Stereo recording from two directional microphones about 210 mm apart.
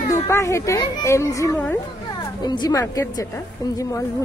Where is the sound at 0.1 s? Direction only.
15° left (ahead or behind).